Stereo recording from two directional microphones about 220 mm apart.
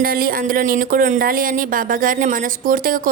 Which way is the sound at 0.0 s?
40° right (ahead or behind).